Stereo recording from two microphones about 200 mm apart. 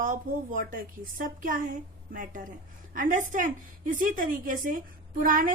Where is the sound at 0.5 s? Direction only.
45° right (ahead or behind).